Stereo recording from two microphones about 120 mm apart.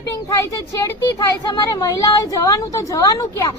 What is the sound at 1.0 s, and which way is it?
A woman's voice, 30° left (ahead or behind).